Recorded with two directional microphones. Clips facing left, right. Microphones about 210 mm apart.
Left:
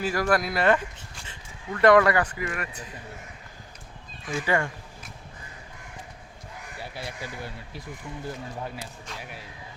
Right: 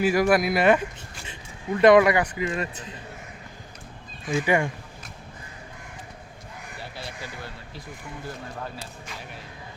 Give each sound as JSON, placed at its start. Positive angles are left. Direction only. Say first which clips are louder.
{"t": 0.0, "sound": "a man's voice", "louder": "right 5 dB", "side_deg": -10}
{"t": 4.4, "sound": "speech", "louder": "right 3 dB", "side_deg": -15}